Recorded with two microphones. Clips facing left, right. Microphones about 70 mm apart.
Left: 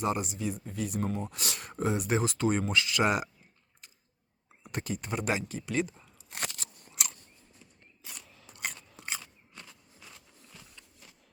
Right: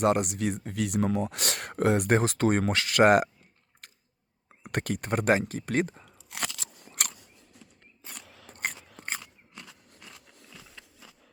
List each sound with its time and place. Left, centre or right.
0.0 s speech: right
3.8 s chewing: right
4.6 s speech: right
6.3 s crunch: right
7.1 s scissors: right
8.2 s biting: right
8.4 s biting: right
8.7 s biting: right
9.0 s biting: right
9.2 s biting: right